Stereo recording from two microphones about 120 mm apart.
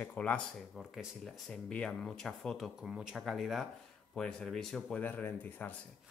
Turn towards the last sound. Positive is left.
turn(degrees=15)  # may be behind; listen again after turning